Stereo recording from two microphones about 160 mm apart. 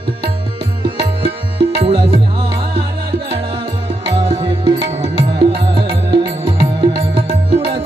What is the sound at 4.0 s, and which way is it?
Music, 30° right (ahead or behind).